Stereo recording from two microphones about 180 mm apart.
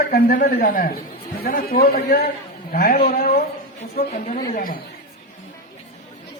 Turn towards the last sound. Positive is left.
turn(degrees=50)  # may be behind; listen again after turning